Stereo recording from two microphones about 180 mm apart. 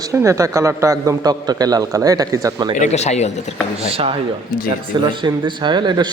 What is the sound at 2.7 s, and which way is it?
Speech, 40° left (ahead or behind).